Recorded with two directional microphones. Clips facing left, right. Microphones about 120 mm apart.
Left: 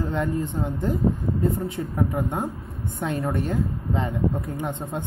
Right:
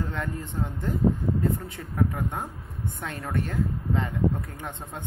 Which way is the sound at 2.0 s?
20° left (ahead or behind).